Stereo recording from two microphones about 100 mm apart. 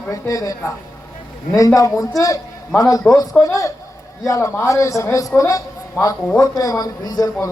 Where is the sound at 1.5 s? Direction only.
35° left (ahead or behind).